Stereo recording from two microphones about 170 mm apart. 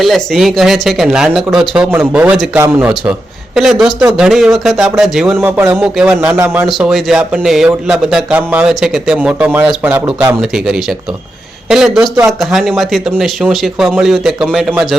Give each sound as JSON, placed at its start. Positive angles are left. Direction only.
{"t": 0.0, "sound": "speech", "side_deg": 0}
{"t": 2.9, "sound": "speech", "side_deg": 0}
{"t": 5.4, "sound": "speech", "side_deg": -15}
{"t": 6.7, "sound": "speech", "side_deg": 0}